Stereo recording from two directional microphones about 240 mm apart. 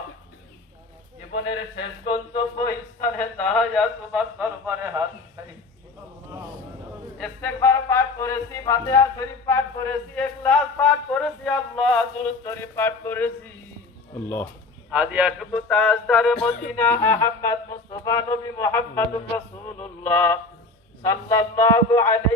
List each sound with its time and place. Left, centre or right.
2.0 s speech: centre
7.2 s music: centre
14.9 s a man's voice: centre
16.3 s a sound: left
16.7 s music: centre